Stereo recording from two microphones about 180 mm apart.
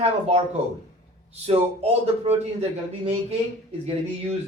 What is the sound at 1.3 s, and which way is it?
Speech, 35° right (ahead or behind).